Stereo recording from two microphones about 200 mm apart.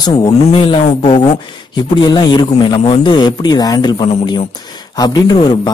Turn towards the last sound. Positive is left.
turn(degrees=20)  # may be behind; listen again after turning